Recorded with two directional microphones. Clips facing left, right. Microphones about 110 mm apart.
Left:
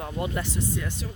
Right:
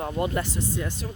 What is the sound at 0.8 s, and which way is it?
Speech, 35° right (ahead or behind).